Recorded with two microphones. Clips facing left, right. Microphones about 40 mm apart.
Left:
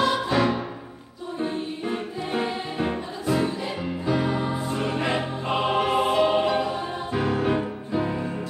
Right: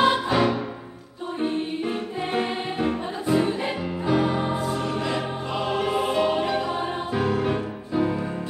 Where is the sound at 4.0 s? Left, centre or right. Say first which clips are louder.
Right 2 dB; centre.